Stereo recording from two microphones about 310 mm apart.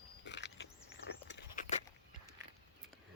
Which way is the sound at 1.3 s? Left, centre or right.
Left.